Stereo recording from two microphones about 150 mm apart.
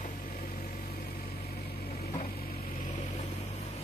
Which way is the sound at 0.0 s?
70° left (ahead or behind).